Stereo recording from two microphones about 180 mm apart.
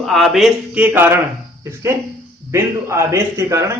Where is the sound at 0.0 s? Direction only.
Centre (ahead or behind).